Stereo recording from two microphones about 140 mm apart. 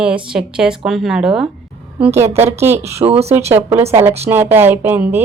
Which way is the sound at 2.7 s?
50° right (ahead or behind).